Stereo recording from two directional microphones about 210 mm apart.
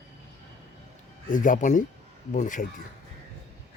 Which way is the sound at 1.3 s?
40° left (ahead or behind).